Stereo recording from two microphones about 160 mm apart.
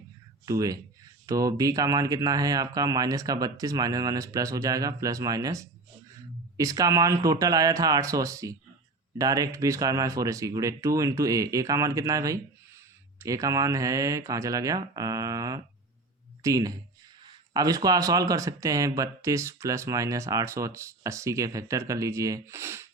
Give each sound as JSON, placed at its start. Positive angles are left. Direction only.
{"t": 0.4, "sound": "speech", "side_deg": -20}